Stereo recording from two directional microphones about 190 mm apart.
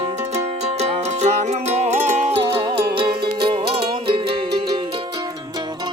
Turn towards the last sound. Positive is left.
turn(degrees=-25)  # may be behind; listen again after turning